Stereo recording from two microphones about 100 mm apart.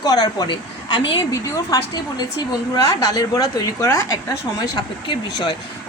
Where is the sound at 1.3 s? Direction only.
35° left (ahead or behind).